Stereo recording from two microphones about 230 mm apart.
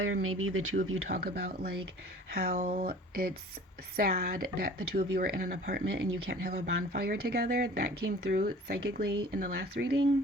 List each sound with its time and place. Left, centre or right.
0.0 s speech: right
0.9 s speech: right